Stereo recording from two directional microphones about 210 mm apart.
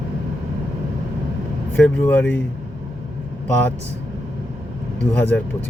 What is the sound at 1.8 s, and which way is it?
Speech, 10° left (ahead or behind).